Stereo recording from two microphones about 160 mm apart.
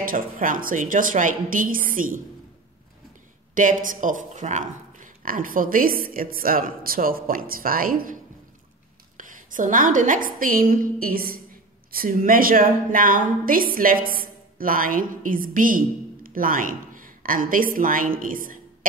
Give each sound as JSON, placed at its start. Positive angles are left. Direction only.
{"t": 0.0, "sound": "speech", "side_deg": -60}
{"t": 3.5, "sound": "a woman's voice", "side_deg": -55}